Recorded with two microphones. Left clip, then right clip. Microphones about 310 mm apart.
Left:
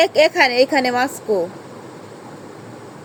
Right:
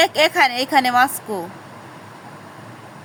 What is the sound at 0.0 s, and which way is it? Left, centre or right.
A woman's voice, centre.